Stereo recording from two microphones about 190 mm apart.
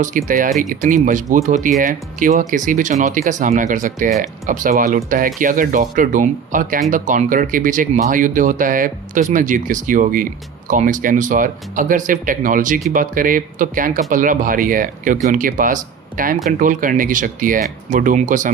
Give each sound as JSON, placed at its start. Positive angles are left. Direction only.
{"t": 0.3, "sound": "speech", "side_deg": -45}